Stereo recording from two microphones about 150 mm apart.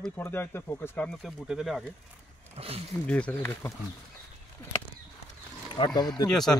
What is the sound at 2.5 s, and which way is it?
Speech, 40° right (ahead or behind).